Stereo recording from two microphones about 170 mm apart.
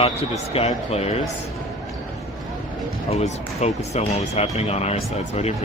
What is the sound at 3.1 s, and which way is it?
Speech, 40° left (ahead or behind).